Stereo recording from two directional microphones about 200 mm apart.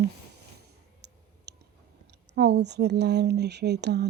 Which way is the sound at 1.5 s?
55° right (ahead or behind).